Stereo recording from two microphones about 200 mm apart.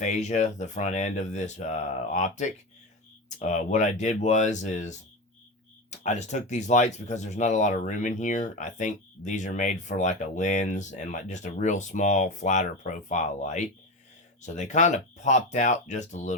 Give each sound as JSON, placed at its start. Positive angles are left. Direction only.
{"t": 0.0, "sound": "speech", "side_deg": 35}